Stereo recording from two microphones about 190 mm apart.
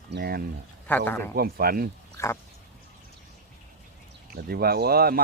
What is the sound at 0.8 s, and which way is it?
Speech, 10° left (ahead or behind).